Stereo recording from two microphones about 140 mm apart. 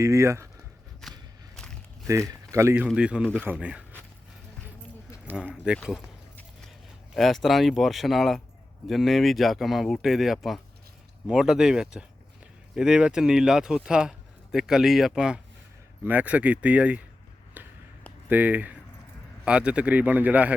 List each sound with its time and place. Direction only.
0.0 s speech: 20° right (ahead or behind)
1.0 s a sound: centre (ahead or behind)
2.0 s speech: 25° right (ahead or behind)
2.9 s a man's voice: 5° right (ahead or behind)
5.4 s a man's voice: 5° right (ahead or behind)
7.1 s a man's voice: centre (ahead or behind)
17.6 s a sound: 10° right (ahead or behind)
18.3 s a man's voice: 10° right (ahead or behind)